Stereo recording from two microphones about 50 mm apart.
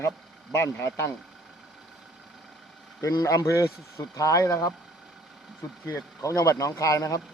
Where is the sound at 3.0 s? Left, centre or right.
Left.